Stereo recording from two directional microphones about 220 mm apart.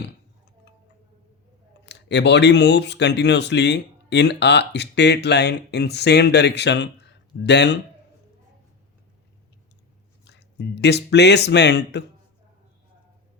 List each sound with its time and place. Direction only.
1.9 s speech: 50° left (ahead or behind)
10.2 s speech: 50° left (ahead or behind)